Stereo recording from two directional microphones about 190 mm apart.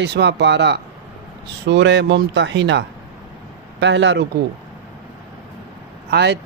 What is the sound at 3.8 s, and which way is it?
Mantra, 70° right (ahead or behind).